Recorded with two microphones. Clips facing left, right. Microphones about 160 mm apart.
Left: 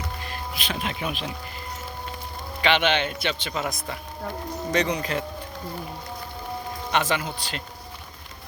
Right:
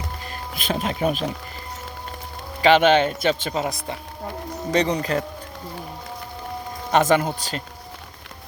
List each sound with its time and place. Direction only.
0.5 s speech: 40° right (ahead or behind)
2.6 s speech: 40° right (ahead or behind)
3.5 s speech: 30° right (ahead or behind)
6.9 s speech: 45° right (ahead or behind)